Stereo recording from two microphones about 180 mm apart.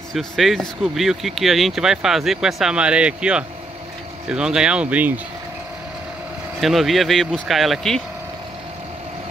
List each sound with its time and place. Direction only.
0.1 s speech: centre (ahead or behind)
6.6 s speech: centre (ahead or behind)